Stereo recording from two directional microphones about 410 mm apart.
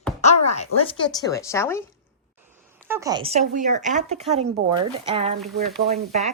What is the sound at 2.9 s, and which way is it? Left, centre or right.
Speech, centre.